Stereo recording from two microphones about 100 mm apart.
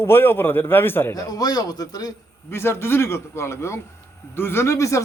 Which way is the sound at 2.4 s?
25° left (ahead or behind).